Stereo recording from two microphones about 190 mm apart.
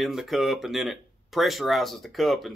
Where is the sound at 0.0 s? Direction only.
Centre (ahead or behind).